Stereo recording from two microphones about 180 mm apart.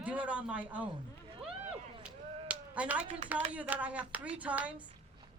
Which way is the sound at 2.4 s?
10° right (ahead or behind).